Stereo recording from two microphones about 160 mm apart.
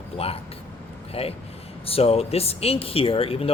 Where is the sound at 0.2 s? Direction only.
40° left (ahead or behind).